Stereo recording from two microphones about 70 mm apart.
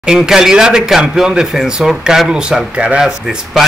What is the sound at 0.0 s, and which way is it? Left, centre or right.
Speech, centre.